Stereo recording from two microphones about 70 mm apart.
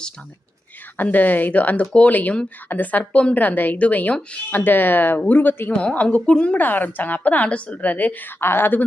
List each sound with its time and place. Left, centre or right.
0.9 s a woman's voice: left
8.4 s speech: left